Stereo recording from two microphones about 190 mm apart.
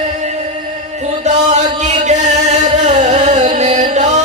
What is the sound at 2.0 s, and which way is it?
Music, 40° right (ahead or behind).